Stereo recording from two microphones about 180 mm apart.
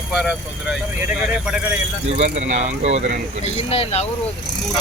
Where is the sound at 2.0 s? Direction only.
35° right (ahead or behind).